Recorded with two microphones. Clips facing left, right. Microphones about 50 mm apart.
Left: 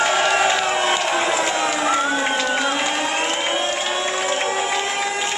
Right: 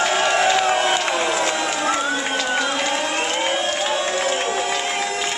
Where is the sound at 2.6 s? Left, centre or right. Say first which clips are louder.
Left 1 dB; centre.